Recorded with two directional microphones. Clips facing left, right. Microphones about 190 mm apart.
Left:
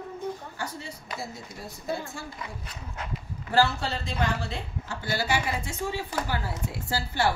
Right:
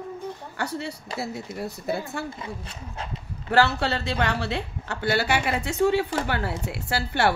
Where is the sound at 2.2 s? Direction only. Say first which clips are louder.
Right 5 dB; 25° right (ahead or behind).